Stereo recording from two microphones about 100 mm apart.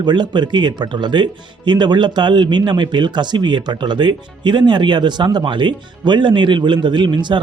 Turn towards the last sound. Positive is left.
turn(degrees=-50)  # may be behind; listen again after turning